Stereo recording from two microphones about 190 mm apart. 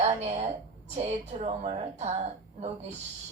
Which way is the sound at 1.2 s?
35° right (ahead or behind).